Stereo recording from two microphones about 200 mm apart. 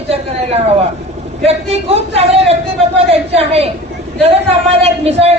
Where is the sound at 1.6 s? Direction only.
30° right (ahead or behind).